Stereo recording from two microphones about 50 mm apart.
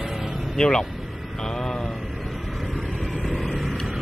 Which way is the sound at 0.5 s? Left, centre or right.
Centre.